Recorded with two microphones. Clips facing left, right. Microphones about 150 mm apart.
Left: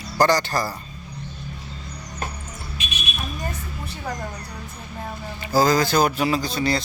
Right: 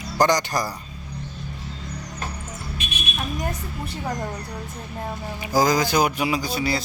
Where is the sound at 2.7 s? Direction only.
55° right (ahead or behind).